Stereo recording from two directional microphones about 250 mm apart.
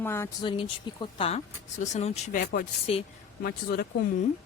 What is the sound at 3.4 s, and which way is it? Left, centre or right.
Speech, left.